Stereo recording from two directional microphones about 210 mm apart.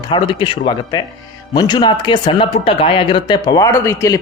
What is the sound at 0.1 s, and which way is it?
Speech, 25° left (ahead or behind).